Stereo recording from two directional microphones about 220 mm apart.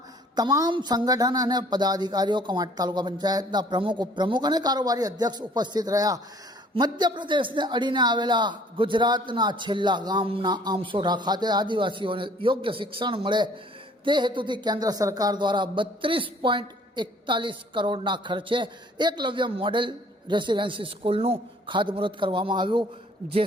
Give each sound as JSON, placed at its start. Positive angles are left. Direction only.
{"t": 0.3, "sound": "speech", "side_deg": -15}